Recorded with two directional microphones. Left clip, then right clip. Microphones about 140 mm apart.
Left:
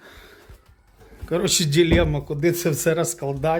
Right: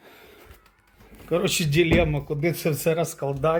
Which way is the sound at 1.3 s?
20° left (ahead or behind).